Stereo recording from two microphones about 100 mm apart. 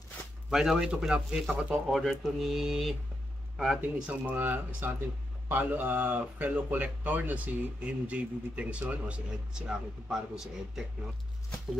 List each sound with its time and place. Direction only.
0.5 s speech: 5° right (ahead or behind)
1.9 s speech: centre (ahead or behind)